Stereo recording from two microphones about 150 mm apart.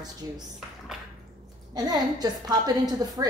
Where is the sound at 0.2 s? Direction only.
25° right (ahead or behind).